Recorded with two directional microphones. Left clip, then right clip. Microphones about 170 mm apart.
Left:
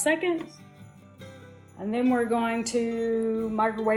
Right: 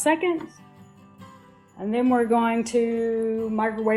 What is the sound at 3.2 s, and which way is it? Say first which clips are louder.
Speech: right 2 dB; 75° right (ahead or behind).